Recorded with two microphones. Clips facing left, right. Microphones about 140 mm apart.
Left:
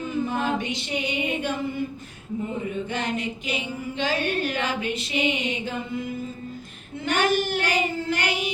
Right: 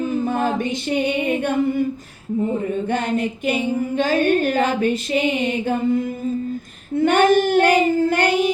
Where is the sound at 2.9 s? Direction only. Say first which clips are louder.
Right 7 dB; 55° right (ahead or behind).